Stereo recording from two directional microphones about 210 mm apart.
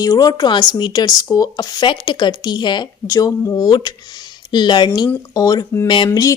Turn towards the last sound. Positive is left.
turn(degrees=15)  # may be behind; listen again after turning